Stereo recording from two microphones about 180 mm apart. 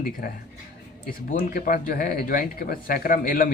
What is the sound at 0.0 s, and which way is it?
Speech, 55° left (ahead or behind).